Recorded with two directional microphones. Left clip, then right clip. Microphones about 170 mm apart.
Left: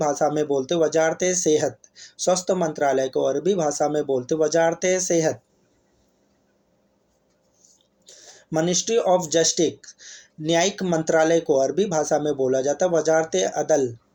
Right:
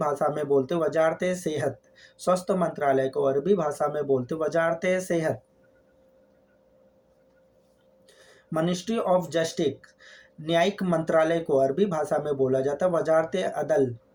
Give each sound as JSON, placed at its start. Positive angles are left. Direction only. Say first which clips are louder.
{"t": 0.0, "sound": "speech", "louder": "left 4 dB", "side_deg": 30}
{"t": 8.0, "sound": "a sound", "louder": "left 7 dB", "side_deg": 30}
{"t": 9.3, "sound": "speech", "louder": "left 6 dB", "side_deg": 30}